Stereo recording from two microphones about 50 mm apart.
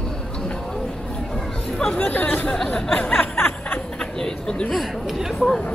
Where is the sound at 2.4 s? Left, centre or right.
Centre.